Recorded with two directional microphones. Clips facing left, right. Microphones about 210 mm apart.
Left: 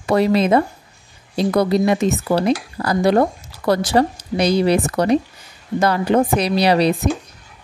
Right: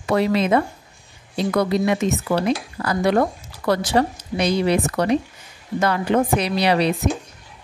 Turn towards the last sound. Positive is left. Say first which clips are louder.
# left 3 dB
turn(degrees=35)  # may be behind; listen again after turning